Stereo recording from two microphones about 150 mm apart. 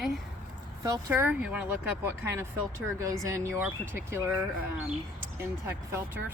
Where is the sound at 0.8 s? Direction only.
20° right (ahead or behind).